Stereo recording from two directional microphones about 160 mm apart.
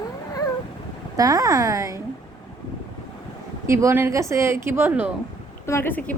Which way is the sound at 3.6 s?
15° right (ahead or behind).